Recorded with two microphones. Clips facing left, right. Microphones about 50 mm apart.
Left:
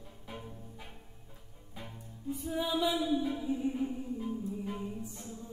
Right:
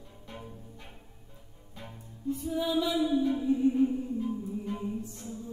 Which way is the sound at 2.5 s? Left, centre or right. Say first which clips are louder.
Right 2 dB; centre.